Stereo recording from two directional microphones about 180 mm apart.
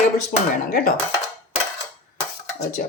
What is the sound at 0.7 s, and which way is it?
Dishes, 55° left (ahead or behind).